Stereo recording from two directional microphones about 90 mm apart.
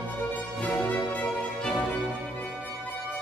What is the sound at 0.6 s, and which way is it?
Music, 15° left (ahead or behind).